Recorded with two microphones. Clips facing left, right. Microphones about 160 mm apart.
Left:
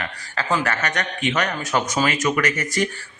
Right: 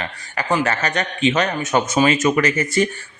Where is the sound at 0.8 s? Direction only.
25° right (ahead or behind).